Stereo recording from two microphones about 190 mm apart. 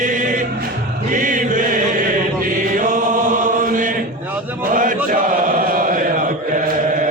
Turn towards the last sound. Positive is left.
turn(degrees=-45)  # may be behind; listen again after turning